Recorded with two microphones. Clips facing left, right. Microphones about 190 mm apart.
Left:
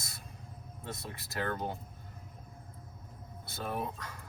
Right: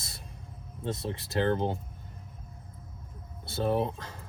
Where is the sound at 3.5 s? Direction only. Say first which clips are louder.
Right 9 dB; 30° right (ahead or behind).